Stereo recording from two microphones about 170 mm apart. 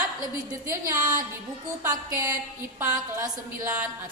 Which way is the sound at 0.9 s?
50° right (ahead or behind).